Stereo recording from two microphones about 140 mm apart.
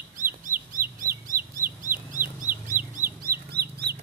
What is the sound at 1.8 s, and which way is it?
Chicken, 70° right (ahead or behind).